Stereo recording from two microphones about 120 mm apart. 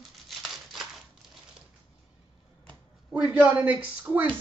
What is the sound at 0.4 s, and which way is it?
Scissors, centre (ahead or behind).